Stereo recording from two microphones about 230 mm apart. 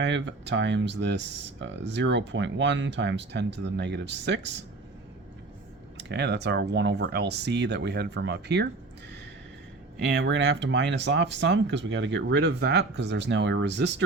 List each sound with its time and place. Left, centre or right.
0.0 s speech: right
6.0 s speech: right
10.2 s speech: right